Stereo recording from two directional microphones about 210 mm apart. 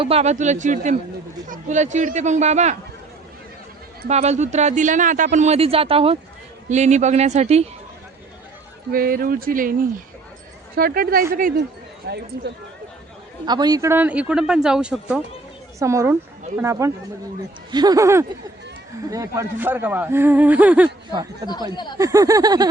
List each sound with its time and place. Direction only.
0.0 s speech: 30° right (ahead or behind)
4.1 s speech: 30° right (ahead or behind)
8.9 s speech: 45° right (ahead or behind)
10.8 s speech: 45° right (ahead or behind)
12.0 s speech: 50° right (ahead or behind)
13.4 s speech: 20° right (ahead or behind)
21.1 s speech: 20° right (ahead or behind)